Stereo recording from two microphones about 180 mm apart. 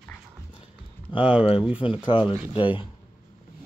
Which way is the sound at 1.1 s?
5° right (ahead or behind).